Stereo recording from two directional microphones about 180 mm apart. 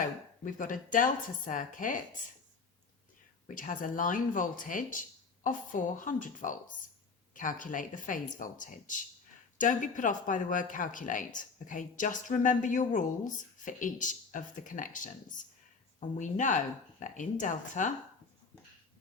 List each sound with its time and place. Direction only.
0.0 s a woman's voice: 45° left (ahead or behind)
3.5 s a woman's voice: 50° left (ahead or behind)